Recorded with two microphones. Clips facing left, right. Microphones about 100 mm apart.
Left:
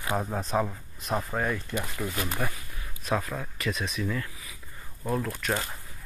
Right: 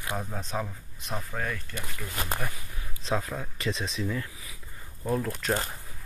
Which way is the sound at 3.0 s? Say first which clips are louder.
Left 1 dB; 20° right (ahead or behind).